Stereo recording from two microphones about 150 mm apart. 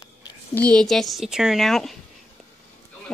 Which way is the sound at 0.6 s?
5° left (ahead or behind).